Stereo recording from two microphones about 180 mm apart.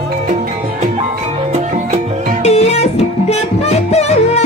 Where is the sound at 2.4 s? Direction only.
35° left (ahead or behind).